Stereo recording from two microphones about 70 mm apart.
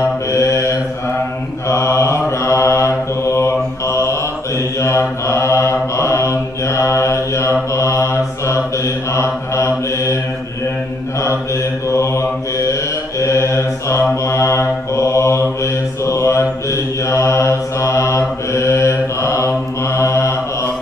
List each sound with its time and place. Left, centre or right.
0.3 s mantra: left
11.9 s mantra: left